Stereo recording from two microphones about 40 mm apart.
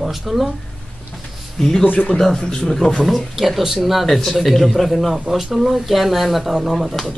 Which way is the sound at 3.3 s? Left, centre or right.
Centre.